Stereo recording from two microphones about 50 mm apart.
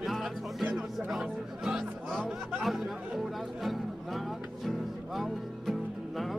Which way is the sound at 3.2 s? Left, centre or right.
Centre.